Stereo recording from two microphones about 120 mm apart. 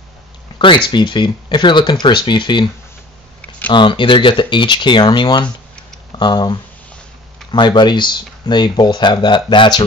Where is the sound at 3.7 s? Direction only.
40° left (ahead or behind).